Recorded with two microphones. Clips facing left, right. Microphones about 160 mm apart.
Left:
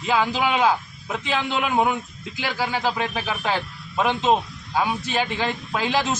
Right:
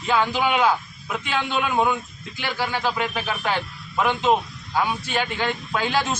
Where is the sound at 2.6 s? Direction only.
15° left (ahead or behind).